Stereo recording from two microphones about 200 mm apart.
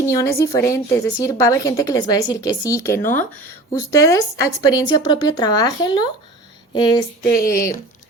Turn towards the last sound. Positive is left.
turn(degrees=45)  # may be behind; listen again after turning